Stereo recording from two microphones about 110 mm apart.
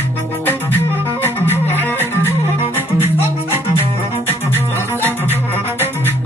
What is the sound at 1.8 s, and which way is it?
Music, 20° left (ahead or behind).